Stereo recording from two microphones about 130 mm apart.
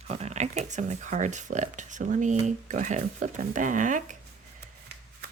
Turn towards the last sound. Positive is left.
turn(degrees=-80)